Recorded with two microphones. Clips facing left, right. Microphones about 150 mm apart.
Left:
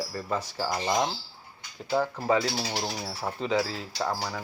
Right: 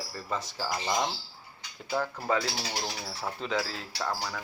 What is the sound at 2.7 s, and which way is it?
Speech, 20° left (ahead or behind).